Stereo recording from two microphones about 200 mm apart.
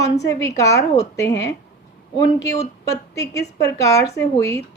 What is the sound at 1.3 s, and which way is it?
Speech, 60° left (ahead or behind).